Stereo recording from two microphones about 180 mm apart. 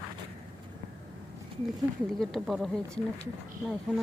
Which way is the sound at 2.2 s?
Centre (ahead or behind).